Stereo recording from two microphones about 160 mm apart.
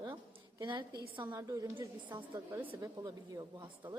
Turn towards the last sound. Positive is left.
turn(degrees=-25)  # may be behind; listen again after turning